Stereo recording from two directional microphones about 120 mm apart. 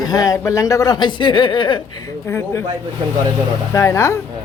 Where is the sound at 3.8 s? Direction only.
25° left (ahead or behind).